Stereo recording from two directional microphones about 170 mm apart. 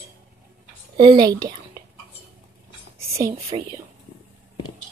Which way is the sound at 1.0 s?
25° right (ahead or behind).